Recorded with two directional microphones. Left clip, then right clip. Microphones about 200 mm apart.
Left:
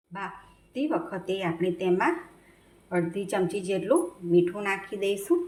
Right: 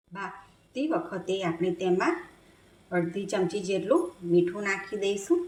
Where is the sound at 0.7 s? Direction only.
Centre (ahead or behind).